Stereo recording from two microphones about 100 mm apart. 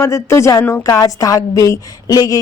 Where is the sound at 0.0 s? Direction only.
30° left (ahead or behind).